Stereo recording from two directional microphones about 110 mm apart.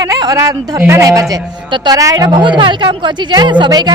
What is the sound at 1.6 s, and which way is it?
A woman's voice, 45° right (ahead or behind).